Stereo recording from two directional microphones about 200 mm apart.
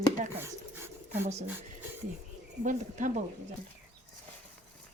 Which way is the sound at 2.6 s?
40° right (ahead or behind).